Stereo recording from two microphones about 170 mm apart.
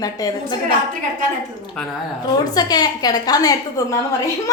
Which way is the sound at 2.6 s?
25° left (ahead or behind).